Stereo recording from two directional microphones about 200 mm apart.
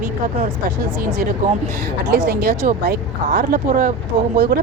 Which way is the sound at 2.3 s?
50° right (ahead or behind).